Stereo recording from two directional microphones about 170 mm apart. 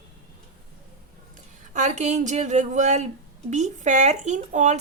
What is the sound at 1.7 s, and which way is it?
Speech, 45° right (ahead or behind).